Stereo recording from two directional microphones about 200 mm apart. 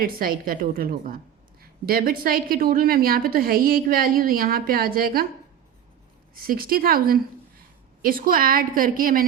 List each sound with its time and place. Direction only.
0.0 s a woman's voice: 45° right (ahead or behind)
6.4 s a woman's voice: 45° right (ahead or behind)